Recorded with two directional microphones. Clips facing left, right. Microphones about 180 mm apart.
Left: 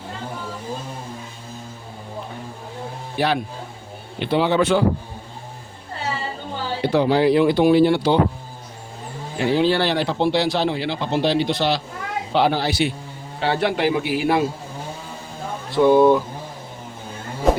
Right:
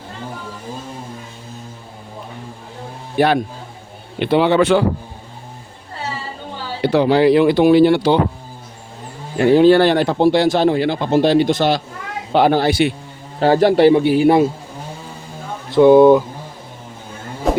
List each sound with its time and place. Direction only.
3.2 s speech: 55° right (ahead or behind)
4.2 s speech: 65° right (ahead or behind)
6.8 s speech: 80° right
9.4 s speech: 50° right (ahead or behind)
13.4 s a man's voice: 40° right (ahead or behind)
15.7 s speech: 25° right (ahead or behind)
17.5 s a sound: centre (ahead or behind)